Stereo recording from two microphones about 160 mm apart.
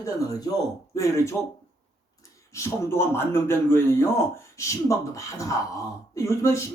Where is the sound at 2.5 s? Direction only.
15° left (ahead or behind).